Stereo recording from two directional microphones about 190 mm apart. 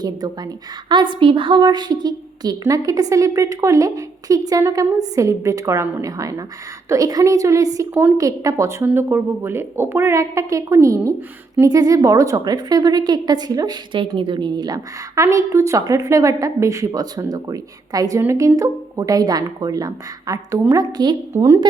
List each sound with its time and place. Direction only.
0.0 s a woman's voice: 20° right (ahead or behind)